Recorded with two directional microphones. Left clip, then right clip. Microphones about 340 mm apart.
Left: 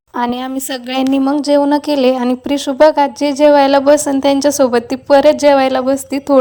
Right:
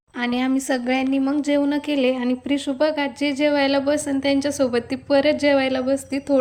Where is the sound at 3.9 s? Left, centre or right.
Left.